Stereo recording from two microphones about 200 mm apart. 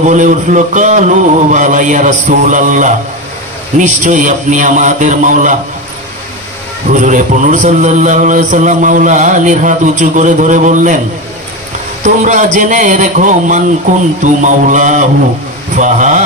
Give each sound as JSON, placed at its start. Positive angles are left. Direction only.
{"t": 0.0, "sound": "a man's voice", "side_deg": -40}
{"t": 6.9, "sound": "a man's voice", "side_deg": -40}
{"t": 12.0, "sound": "a man's voice", "side_deg": -40}